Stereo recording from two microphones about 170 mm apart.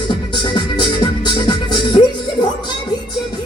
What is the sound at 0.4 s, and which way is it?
Music, 25° left (ahead or behind).